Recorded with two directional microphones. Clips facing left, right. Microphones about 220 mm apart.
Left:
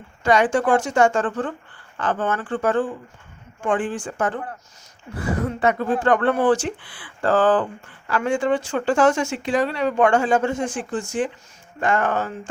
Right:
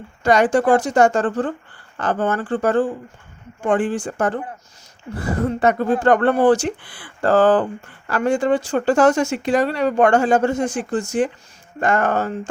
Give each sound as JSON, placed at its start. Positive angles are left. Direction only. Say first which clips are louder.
{"t": 0.2, "sound": "speech", "louder": "right 3 dB", "side_deg": -40}